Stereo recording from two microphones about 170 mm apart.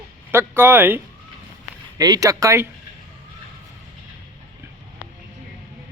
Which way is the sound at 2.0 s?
20° right (ahead or behind).